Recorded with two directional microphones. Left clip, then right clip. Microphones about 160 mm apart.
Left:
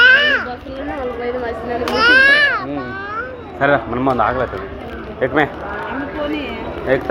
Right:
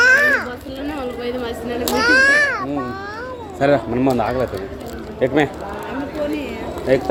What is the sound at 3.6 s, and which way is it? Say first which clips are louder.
A man's voice: left 1 dB; 65° right (ahead or behind).